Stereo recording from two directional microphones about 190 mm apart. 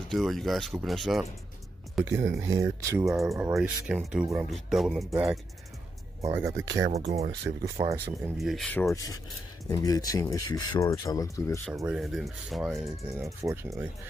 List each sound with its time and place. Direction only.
0.1 s speech: centre (ahead or behind)
2.0 s speech: 15° right (ahead or behind)
3.1 s speech: centre (ahead or behind)
6.2 s speech: 15° right (ahead or behind)
6.9 s speech: 35° right (ahead or behind)
8.4 s speech: centre (ahead or behind)
8.9 s speech: 20° left (ahead or behind)
11.9 s speech: centre (ahead or behind)
13.2 s speech: 15° right (ahead or behind)